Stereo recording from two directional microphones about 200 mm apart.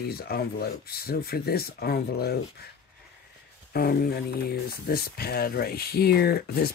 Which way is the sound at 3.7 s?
50° left (ahead or behind).